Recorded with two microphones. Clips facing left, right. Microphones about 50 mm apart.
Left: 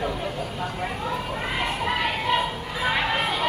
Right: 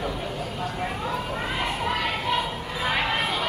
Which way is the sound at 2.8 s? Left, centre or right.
Centre.